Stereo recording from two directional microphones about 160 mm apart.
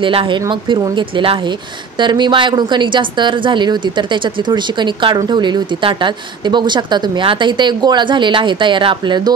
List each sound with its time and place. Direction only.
0.0 s a woman's voice: 30° right (ahead or behind)